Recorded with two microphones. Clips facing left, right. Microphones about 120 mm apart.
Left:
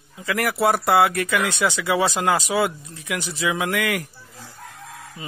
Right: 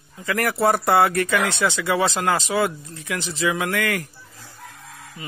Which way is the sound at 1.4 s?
15° left (ahead or behind).